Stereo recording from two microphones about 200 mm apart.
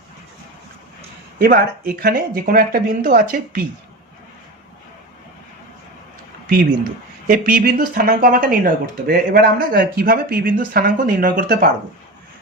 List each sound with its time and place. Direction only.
1.4 s speech: 45° right (ahead or behind)
7.3 s speech: 45° right (ahead or behind)